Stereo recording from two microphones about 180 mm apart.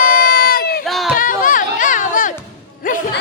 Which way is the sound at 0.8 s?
Centre (ahead or behind).